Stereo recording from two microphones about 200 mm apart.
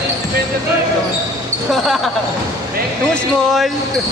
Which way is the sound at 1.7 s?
Centre (ahead or behind).